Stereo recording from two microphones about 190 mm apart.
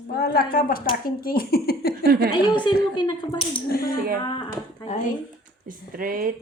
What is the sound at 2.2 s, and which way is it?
Speech, 25° left (ahead or behind).